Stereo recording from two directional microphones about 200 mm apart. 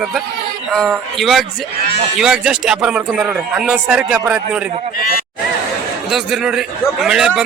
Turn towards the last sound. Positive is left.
turn(degrees=-5)  # may be behind; listen again after turning